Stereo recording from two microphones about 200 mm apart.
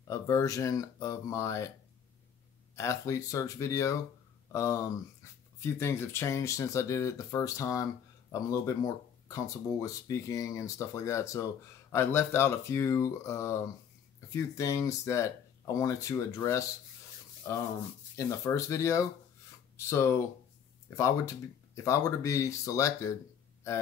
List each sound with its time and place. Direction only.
0.1 s speech: 15° left (ahead or behind)
2.7 s speech: 15° left (ahead or behind)
17.4 s rub: 15° left (ahead or behind)
18.1 s speech: 15° left (ahead or behind)